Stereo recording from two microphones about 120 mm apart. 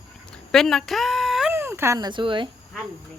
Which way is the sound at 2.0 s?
40° right (ahead or behind).